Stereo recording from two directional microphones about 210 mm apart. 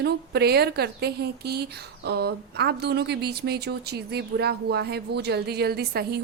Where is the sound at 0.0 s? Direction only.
50° right (ahead or behind).